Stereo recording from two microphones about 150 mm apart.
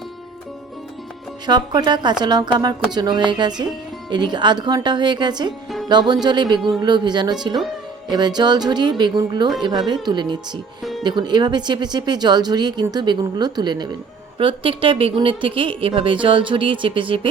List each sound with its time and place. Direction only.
1.5 s speech: 30° right (ahead or behind)
8.4 s a woman's voice: 30° right (ahead or behind)